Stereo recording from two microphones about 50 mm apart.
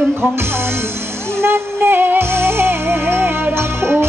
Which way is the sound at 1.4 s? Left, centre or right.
Right.